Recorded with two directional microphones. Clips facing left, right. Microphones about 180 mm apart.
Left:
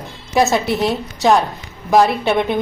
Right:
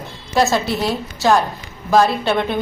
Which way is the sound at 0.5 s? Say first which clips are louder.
Left 2 dB; 20° left (ahead or behind).